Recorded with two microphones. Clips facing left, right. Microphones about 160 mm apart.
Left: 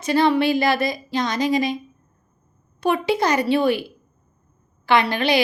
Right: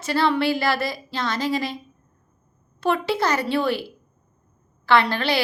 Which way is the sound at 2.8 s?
15° left (ahead or behind).